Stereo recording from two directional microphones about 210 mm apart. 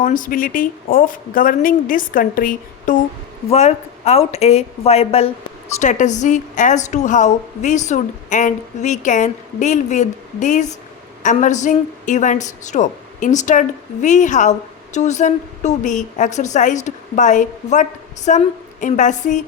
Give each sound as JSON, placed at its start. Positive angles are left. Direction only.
{"t": 0.0, "sound": "a woman's voice", "side_deg": 40}